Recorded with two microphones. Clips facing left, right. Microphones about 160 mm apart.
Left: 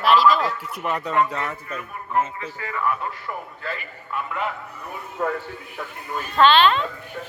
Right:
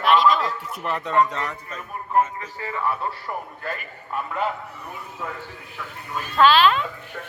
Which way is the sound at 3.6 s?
45° right (ahead or behind).